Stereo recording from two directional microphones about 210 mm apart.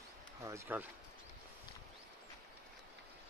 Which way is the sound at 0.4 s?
15° right (ahead or behind).